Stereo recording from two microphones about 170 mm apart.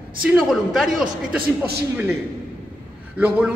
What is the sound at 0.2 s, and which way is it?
Speech, 5° right (ahead or behind).